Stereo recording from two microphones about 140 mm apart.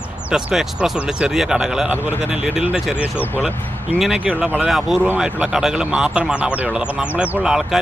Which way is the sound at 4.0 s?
5° right (ahead or behind).